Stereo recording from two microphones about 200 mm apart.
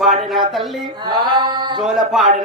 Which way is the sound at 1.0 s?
20° right (ahead or behind).